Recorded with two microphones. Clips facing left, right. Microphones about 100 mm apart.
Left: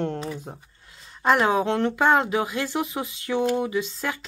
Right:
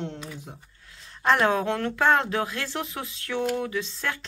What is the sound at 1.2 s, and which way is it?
Speech, 10° left (ahead or behind).